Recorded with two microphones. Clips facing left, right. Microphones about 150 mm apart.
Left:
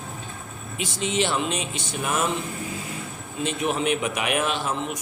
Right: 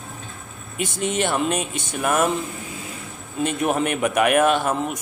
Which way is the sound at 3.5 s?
50° right (ahead or behind).